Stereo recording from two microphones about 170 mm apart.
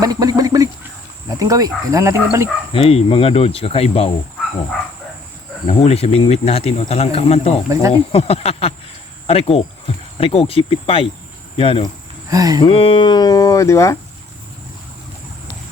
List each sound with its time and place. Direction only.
0.0 s speech: 20° right (ahead or behind)
2.7 s speech: 35° left (ahead or behind)
5.6 s speech: 35° left (ahead or behind)
7.7 s speech: 20° right (ahead or behind)
8.1 s speech: 35° left (ahead or behind)
12.3 s speech: 20° right (ahead or behind)
12.6 s speech: 30° left (ahead or behind); by 13.9 s 15° left (ahead or behind)